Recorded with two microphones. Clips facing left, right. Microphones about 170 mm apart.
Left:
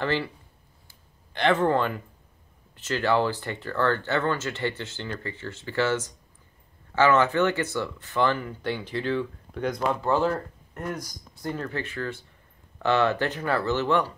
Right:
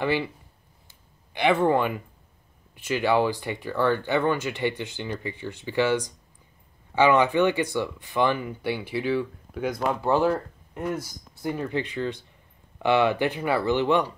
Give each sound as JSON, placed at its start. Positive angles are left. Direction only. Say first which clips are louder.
{"t": 0.0, "sound": "speech", "louder": "right 2 dB", "side_deg": -15}
{"t": 0.8, "sound": "a sound", "louder": "even", "side_deg": -10}
{"t": 2.7, "sound": "speech", "louder": "right 1 dB", "side_deg": -15}
{"t": 10.0, "sound": "speech", "louder": "right 4 dB", "side_deg": -15}